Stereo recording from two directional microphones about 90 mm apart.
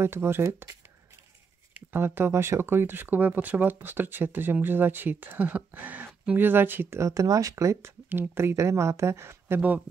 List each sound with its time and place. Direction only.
0.0 s speech: 30° right (ahead or behind)
1.7 s speech: 25° right (ahead or behind)